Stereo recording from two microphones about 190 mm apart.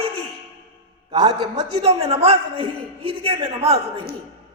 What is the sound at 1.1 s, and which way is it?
A man's voice, 20° right (ahead or behind).